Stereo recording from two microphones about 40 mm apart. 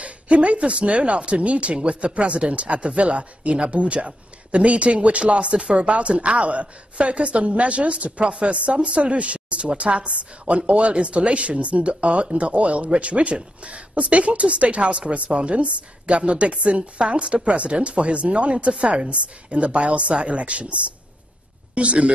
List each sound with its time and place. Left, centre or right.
0.0 s speech: right
21.7 s speech: right